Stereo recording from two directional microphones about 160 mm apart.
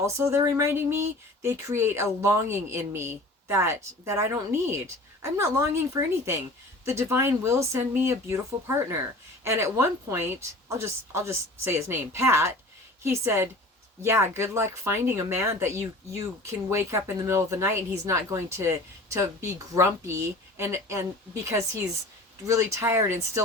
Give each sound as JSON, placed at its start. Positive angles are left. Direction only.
{"t": 0.0, "sound": "speech", "side_deg": -15}
{"t": 22.4, "sound": "speech", "side_deg": -20}